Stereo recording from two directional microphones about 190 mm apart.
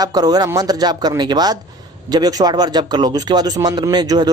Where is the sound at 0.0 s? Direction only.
20° right (ahead or behind).